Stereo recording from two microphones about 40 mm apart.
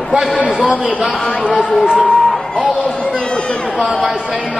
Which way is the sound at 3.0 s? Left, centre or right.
Left.